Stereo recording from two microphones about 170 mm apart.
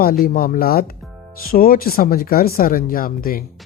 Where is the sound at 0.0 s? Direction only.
60° left (ahead or behind).